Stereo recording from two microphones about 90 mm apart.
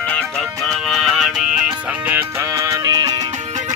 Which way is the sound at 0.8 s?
5° right (ahead or behind).